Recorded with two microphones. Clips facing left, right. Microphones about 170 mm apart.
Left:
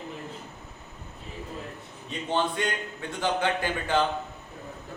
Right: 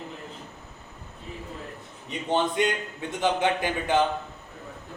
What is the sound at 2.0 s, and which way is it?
A man's voice, 20° right (ahead or behind).